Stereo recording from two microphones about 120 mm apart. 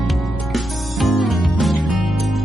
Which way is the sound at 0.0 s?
Centre (ahead or behind).